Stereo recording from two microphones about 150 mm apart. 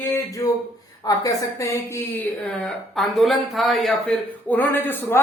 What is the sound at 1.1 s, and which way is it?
Speech, 20° left (ahead or behind).